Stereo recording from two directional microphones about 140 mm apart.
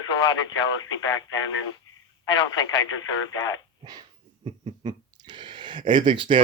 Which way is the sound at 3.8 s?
30° right (ahead or behind).